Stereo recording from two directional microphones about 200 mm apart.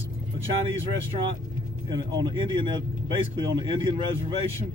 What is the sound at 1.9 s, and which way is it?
Speech, 20° right (ahead or behind).